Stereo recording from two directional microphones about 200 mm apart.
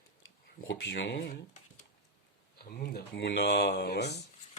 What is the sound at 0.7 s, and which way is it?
Speech, 65° left (ahead or behind).